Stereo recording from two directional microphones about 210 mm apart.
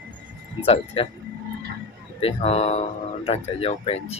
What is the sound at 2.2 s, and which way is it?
Speech, 30° left (ahead or behind).